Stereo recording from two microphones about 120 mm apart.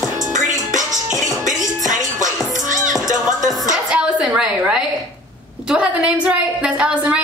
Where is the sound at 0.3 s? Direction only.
90° right.